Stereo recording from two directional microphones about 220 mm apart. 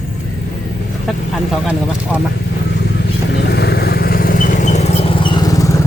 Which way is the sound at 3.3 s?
50° left (ahead or behind).